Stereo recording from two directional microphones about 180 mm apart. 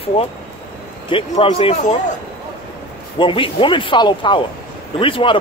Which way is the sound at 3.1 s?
30° left (ahead or behind).